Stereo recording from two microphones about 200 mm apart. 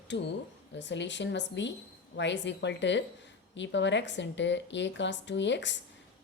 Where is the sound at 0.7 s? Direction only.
60° left (ahead or behind).